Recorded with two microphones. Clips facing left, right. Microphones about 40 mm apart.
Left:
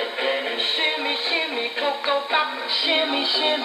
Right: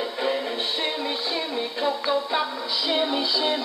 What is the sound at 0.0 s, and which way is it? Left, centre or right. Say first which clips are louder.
Music: left 2 dB; left.